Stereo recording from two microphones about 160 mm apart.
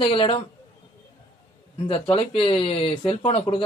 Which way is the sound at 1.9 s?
35° left (ahead or behind).